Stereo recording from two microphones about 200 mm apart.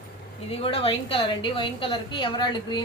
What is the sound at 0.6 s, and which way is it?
A woman's voice, 25° left (ahead or behind).